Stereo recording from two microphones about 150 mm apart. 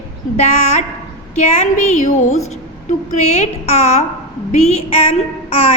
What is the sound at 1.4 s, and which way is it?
A woman's voice, 50° left (ahead or behind).